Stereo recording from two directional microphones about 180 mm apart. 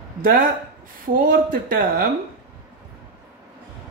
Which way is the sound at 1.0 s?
55° right (ahead or behind).